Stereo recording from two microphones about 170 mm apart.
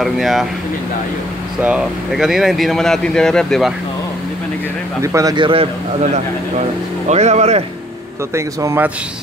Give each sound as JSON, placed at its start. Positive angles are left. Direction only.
{"t": 0.0, "sound": "speech", "side_deg": 0}
{"t": 1.6, "sound": "speech", "side_deg": -5}
{"t": 5.0, "sound": "speech", "side_deg": -20}
{"t": 7.1, "sound": "speech", "side_deg": -40}
{"t": 8.4, "sound": "a man's voice", "side_deg": -15}